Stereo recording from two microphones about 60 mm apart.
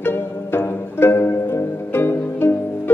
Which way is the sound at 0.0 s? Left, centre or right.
Left.